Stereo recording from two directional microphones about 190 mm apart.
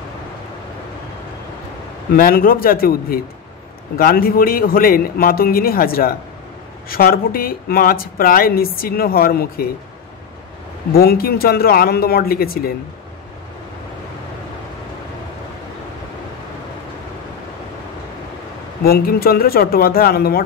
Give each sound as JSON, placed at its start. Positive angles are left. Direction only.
{"t": 2.1, "sound": "speech", "side_deg": 50}
{"t": 10.9, "sound": "speech", "side_deg": 50}
{"t": 18.9, "sound": "speech", "side_deg": 50}